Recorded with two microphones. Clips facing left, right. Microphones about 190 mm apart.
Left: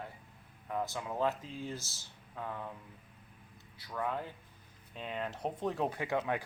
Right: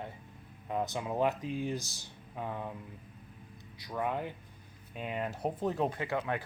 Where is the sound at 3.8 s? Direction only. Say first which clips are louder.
Right 3 dB; 15° right (ahead or behind).